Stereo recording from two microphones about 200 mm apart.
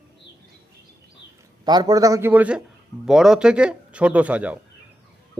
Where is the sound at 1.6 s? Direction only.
20° right (ahead or behind).